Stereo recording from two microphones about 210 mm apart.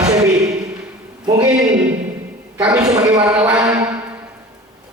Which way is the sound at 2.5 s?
5° right (ahead or behind).